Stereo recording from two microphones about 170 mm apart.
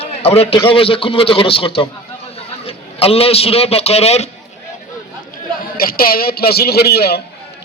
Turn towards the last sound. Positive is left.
turn(degrees=70)  # may be behind; listen again after turning